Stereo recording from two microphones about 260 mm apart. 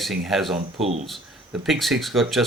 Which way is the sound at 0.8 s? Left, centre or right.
Right.